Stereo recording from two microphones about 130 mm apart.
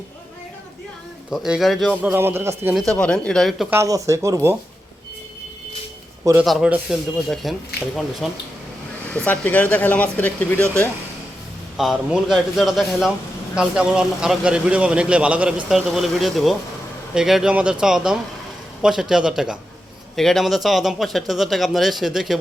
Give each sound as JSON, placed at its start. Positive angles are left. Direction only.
{"t": 1.3, "sound": "speech", "side_deg": 0}
{"t": 2.1, "sound": "a man's voice", "side_deg": -20}
{"t": 2.7, "sound": "speech", "side_deg": 5}
{"t": 3.7, "sound": "speech", "side_deg": -25}
{"t": 6.4, "sound": "speech", "side_deg": 0}
{"t": 9.1, "sound": "speech", "side_deg": 10}
{"t": 11.8, "sound": "a man's voice", "side_deg": 0}